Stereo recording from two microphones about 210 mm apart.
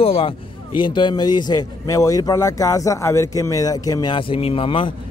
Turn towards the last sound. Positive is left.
turn(degrees=25)  # may be behind; listen again after turning